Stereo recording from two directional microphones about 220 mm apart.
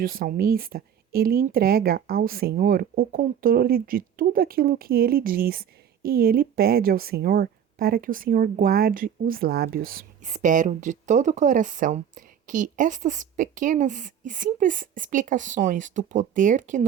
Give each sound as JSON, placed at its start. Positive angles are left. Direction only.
{"t": 0.0, "sound": "speech", "side_deg": -40}